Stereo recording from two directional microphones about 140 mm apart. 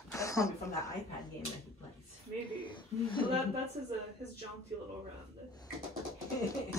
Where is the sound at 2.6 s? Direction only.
35° left (ahead or behind).